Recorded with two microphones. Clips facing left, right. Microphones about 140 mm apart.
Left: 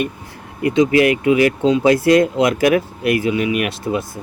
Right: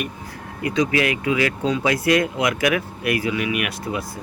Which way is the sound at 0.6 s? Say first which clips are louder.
Left 7 dB; 25° left (ahead or behind).